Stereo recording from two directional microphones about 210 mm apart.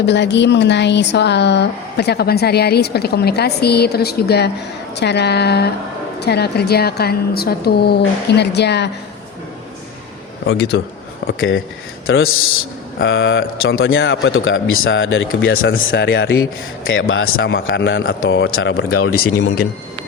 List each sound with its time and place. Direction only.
0.0 s speech: 55° left (ahead or behind)
10.4 s speech: 50° left (ahead or behind)
11.3 s a man's voice: 65° left (ahead or behind)
13.0 s a man's voice: 60° left (ahead or behind)
15.9 s speech: 55° left (ahead or behind)
16.9 s a man's voice: 70° left (ahead or behind)
17.4 s speech: 60° left (ahead or behind); by 19.1 s 80° left